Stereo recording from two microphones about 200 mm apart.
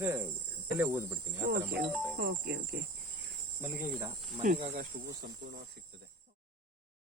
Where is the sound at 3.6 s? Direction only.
10° right (ahead or behind).